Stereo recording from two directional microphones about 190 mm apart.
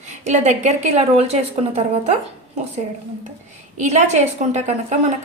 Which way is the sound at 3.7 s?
35° right (ahead or behind).